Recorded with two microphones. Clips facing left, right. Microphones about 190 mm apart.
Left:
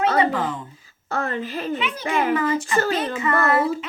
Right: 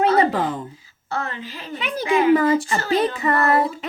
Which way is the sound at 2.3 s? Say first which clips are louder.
Right 4 dB; 35° right (ahead or behind).